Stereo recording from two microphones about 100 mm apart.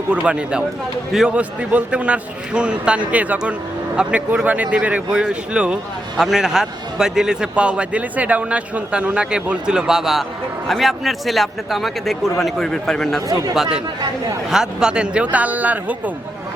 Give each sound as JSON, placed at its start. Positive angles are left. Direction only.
{"t": 0.1, "sound": "a man's voice", "side_deg": -10}
{"t": 13.2, "sound": "speech", "side_deg": -35}
{"t": 13.5, "sound": "a man's voice", "side_deg": -5}